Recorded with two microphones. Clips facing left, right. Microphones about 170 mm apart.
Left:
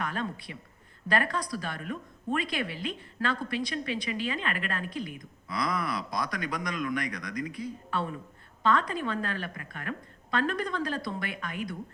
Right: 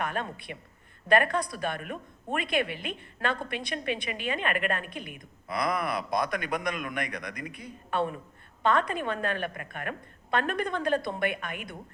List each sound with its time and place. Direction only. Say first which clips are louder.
0.0 s a woman's voice: right 1 dB; 55° right (ahead or behind)